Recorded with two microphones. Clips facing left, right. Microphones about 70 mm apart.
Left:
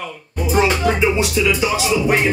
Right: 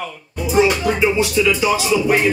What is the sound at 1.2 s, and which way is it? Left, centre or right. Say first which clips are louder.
Music: right 1 dB; left.